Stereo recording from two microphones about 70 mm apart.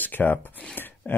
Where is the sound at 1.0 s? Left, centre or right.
Left.